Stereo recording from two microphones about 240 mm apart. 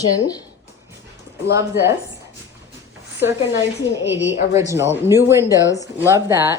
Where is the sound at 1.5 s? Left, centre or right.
Centre.